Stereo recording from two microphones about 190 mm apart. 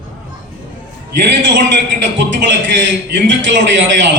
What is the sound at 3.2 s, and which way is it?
Speech, 75° right (ahead or behind).